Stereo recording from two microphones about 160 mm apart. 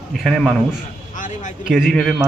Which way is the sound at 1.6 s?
5° right (ahead or behind).